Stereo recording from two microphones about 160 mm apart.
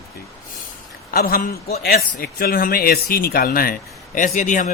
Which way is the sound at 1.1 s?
65° left (ahead or behind).